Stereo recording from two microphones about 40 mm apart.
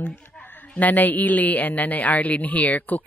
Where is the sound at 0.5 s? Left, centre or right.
Left.